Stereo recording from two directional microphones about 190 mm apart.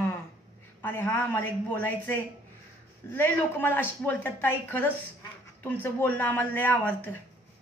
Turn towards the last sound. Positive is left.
turn(degrees=10)  # may be behind; listen again after turning